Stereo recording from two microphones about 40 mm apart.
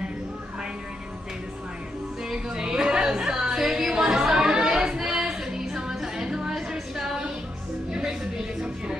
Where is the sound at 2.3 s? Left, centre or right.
Centre.